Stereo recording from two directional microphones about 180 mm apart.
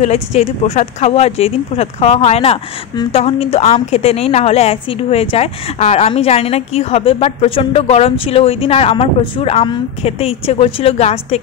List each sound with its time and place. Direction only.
0.0 s speech: 40° left (ahead or behind)